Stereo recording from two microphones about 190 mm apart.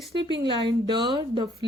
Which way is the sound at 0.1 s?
25° right (ahead or behind).